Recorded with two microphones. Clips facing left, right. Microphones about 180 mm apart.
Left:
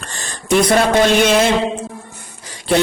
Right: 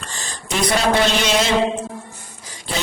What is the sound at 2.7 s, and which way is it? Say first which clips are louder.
Speech: left 11 dB; 65° left (ahead or behind).